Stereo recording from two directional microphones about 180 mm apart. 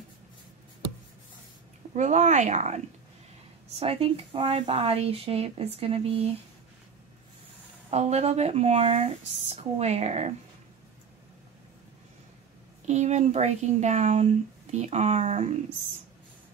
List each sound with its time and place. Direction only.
2.0 s speech: 40° right (ahead or behind)
3.8 s speech: 35° right (ahead or behind)
7.9 s speech: 35° right (ahead or behind)
12.8 s speech: 40° right (ahead or behind)